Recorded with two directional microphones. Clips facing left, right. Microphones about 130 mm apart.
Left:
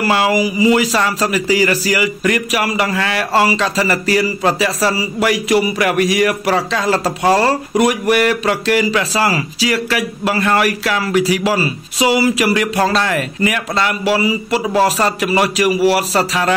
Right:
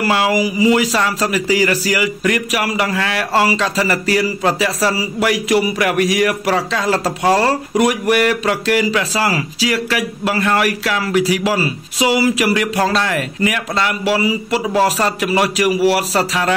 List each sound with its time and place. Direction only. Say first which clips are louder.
0.1 s speech: left 1 dB; 30° left (ahead or behind)